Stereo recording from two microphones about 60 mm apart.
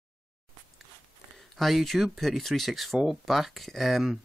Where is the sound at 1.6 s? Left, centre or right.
Centre.